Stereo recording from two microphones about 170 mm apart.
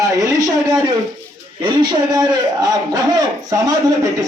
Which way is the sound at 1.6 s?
25° right (ahead or behind).